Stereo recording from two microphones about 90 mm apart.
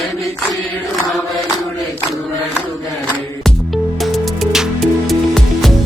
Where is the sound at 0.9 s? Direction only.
Centre (ahead or behind).